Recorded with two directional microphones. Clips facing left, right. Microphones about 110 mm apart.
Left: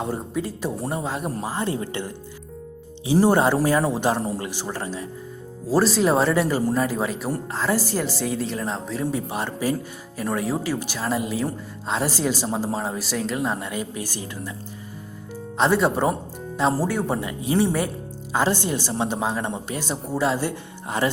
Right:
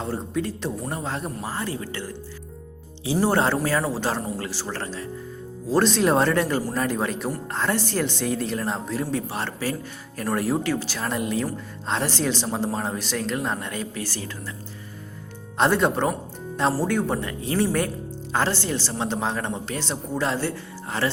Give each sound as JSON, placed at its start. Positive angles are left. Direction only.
{"t": 0.0, "sound": "speech", "side_deg": 10}
{"t": 1.5, "sound": "a man's voice", "side_deg": 20}
{"t": 9.1, "sound": "speech", "side_deg": 15}
{"t": 10.2, "sound": "a man's voice", "side_deg": 0}
{"t": 15.5, "sound": "a man's voice", "side_deg": 0}